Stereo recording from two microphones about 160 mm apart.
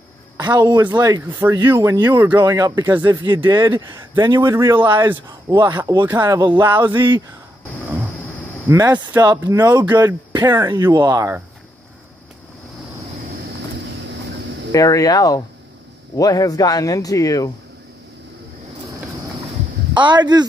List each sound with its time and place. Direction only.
0.4 s speech: 25° right (ahead or behind)
1.2 s speech: 15° right (ahead or behind)
2.0 s speech: 10° right (ahead or behind)
3.4 s speech: 15° right (ahead or behind)
3.7 s speech: 25° right (ahead or behind)
8.6 s speech: 15° right (ahead or behind)
14.7 s speech: 20° left (ahead or behind)
19.9 s speech: 30° right (ahead or behind)